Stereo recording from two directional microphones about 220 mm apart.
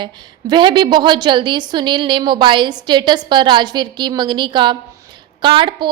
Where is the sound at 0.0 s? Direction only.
20° right (ahead or behind).